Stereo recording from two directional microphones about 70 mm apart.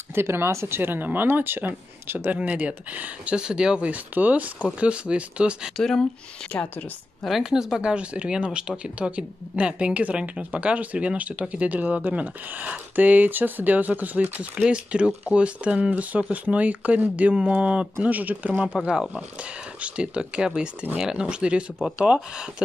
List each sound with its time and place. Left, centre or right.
0.1 s speech: right
2.3 s speech: centre
5.8 s speech: centre
7.2 s speech: centre
18.8 s speech: centre